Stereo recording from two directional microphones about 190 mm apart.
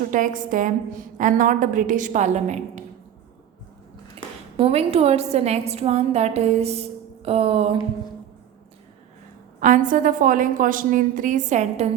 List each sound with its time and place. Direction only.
0.0 s a woman's voice: 45° right (ahead or behind)
4.5 s a woman's voice: 30° right (ahead or behind)
9.6 s a woman's voice: 40° right (ahead or behind)